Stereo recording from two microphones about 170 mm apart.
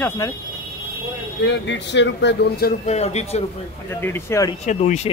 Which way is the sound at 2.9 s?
40° left (ahead or behind).